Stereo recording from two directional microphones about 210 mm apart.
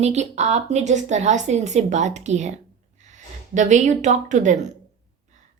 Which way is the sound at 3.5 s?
35° right (ahead or behind).